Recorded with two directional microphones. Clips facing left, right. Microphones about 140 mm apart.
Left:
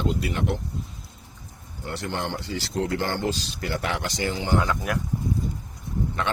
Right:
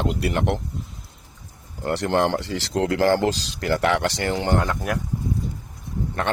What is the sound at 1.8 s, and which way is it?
Speech, 70° right (ahead or behind).